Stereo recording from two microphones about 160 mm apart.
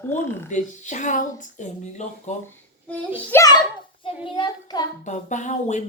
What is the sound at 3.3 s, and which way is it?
Speech, 20° left (ahead or behind).